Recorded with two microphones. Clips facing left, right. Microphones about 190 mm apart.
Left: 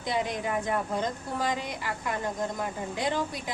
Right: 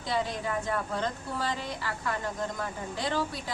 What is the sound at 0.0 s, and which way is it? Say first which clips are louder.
Speech: left 1 dB; 20° left (ahead or behind).